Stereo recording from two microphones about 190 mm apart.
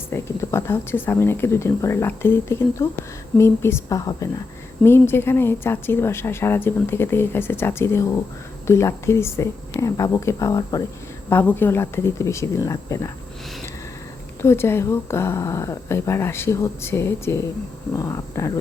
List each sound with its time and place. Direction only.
0.1 s speech: 10° left (ahead or behind)
14.4 s speech: 15° left (ahead or behind)